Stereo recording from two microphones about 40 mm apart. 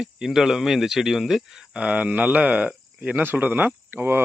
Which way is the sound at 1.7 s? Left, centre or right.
Right.